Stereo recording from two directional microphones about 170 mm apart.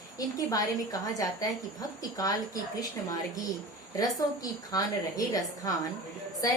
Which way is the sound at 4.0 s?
20° left (ahead or behind).